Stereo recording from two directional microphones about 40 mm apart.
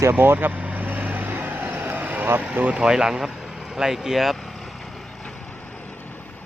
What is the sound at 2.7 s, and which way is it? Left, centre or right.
Speech, centre.